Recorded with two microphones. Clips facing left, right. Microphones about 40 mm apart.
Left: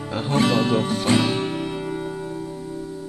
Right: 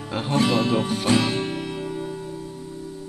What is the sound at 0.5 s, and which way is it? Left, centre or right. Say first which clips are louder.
Music: left 1 dB; centre.